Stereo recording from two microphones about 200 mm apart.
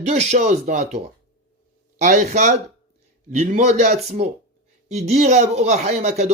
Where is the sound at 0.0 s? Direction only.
35° right (ahead or behind).